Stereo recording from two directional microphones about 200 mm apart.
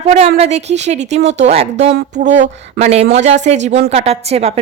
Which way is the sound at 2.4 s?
30° right (ahead or behind).